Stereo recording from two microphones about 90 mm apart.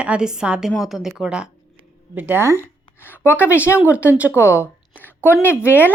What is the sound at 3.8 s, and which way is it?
Speech, 15° right (ahead or behind).